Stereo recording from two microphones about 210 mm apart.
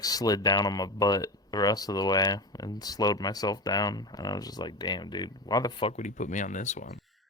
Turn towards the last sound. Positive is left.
turn(degrees=35)  # may be behind; listen again after turning